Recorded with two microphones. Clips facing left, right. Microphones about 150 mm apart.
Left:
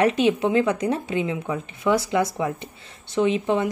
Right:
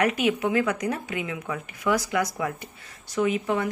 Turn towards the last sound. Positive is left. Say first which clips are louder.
# left 3 dB
turn(degrees=25)  # may be behind; listen again after turning